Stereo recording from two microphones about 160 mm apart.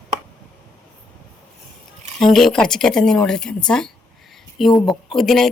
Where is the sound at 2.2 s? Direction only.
Centre (ahead or behind).